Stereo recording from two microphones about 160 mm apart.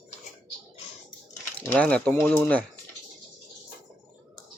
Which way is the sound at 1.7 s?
10° left (ahead or behind).